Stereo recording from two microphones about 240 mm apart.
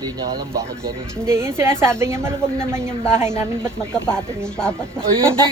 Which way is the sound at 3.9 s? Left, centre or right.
Centre.